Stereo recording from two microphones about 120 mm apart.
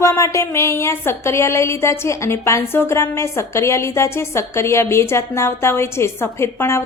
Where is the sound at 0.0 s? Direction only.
25° left (ahead or behind).